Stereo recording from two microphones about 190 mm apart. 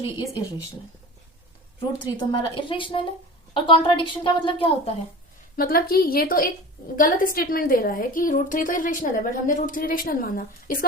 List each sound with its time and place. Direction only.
2.1 s a woman's voice: 25° left (ahead or behind)
5.5 s a woman's voice: 50° left (ahead or behind)